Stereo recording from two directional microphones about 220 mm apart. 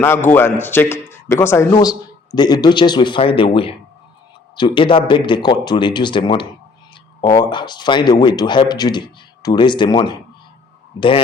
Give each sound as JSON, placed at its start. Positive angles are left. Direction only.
{"t": 0.3, "sound": "a man's voice", "side_deg": 10}